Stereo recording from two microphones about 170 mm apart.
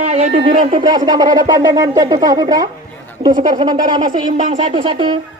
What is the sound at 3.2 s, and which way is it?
Speech, 35° right (ahead or behind).